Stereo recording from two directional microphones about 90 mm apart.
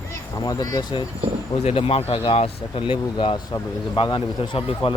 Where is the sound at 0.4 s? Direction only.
45° left (ahead or behind).